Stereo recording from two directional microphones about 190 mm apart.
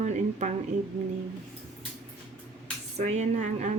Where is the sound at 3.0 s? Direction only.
35° right (ahead or behind).